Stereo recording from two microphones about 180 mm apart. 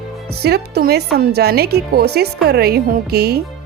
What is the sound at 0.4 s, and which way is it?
A woman's voice, 60° right (ahead or behind).